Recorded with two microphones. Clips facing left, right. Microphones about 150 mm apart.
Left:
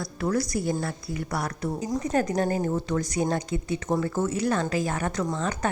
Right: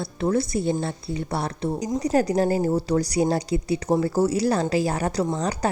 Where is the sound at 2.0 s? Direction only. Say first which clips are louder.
Right 5 dB; 35° right (ahead or behind).